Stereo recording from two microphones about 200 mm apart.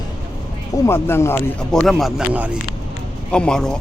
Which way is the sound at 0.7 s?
15° left (ahead or behind).